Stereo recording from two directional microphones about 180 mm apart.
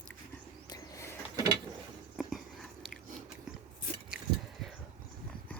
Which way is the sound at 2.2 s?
Centre (ahead or behind).